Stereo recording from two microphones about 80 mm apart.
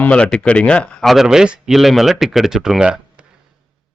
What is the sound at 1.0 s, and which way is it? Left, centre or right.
A man's voice, centre.